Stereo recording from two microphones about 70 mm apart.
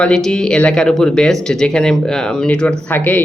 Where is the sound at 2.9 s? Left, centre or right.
Left.